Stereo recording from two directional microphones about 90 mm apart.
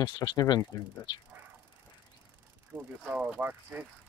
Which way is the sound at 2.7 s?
15° right (ahead or behind).